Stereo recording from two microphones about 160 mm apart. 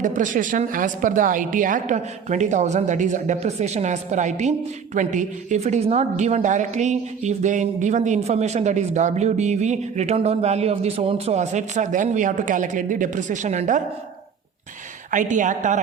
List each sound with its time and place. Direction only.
0.0 s a woman's voice: 55° right (ahead or behind)
15.1 s a woman's voice: 55° right (ahead or behind)